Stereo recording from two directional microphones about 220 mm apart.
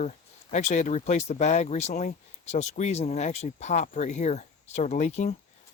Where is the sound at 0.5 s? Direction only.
35° left (ahead or behind).